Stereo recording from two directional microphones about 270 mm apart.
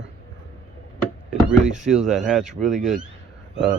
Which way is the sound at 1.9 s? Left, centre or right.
Centre.